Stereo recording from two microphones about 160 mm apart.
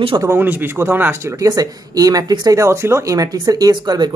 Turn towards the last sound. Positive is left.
turn(degrees=-25)  # may be behind; listen again after turning